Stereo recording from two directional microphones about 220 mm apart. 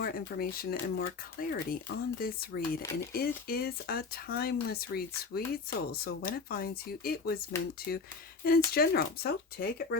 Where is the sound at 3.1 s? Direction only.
45° left (ahead or behind).